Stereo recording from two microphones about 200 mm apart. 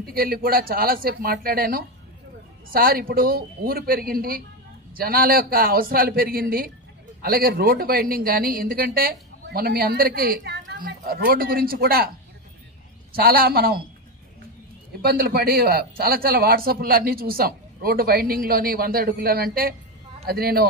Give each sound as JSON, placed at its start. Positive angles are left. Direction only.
{"t": 0.0, "sound": "a man's voice", "side_deg": -50}
{"t": 13.1, "sound": "a man's voice", "side_deg": -50}
{"t": 15.0, "sound": "a man's voice", "side_deg": -50}